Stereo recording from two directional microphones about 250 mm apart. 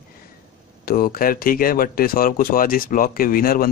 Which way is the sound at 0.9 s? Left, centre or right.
Left.